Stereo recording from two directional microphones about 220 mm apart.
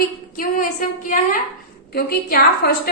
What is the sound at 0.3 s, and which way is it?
A woman's voice, 35° left (ahead or behind).